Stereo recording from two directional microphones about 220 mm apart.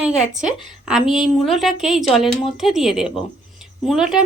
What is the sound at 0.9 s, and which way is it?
Speech, centre (ahead or behind).